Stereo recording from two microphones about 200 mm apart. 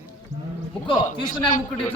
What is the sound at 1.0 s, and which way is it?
Speech, 40° left (ahead or behind).